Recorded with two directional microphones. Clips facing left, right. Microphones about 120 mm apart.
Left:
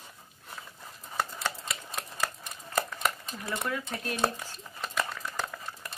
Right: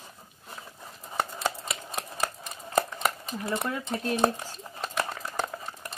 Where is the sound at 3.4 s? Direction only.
30° right (ahead or behind).